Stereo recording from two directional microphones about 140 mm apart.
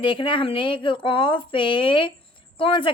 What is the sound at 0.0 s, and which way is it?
A woman's voice, 40° left (ahead or behind).